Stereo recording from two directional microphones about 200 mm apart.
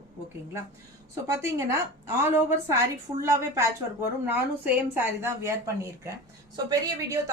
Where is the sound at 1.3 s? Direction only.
15° right (ahead or behind).